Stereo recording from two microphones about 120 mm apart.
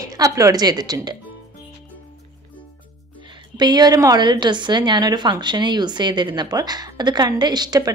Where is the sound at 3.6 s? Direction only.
35° right (ahead or behind).